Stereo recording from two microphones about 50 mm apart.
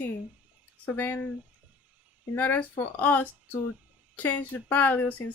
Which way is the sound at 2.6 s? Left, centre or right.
Left.